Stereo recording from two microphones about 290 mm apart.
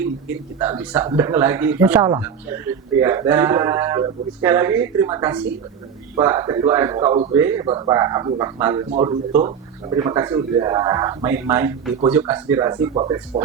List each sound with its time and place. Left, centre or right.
0.0 s speech: centre